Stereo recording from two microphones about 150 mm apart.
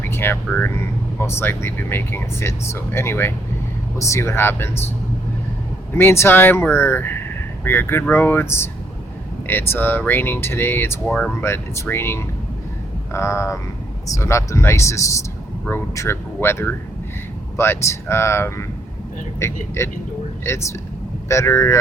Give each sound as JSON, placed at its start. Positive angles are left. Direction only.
{"t": 0.1, "sound": "speech", "side_deg": 15}
{"t": 5.9, "sound": "speech", "side_deg": 15}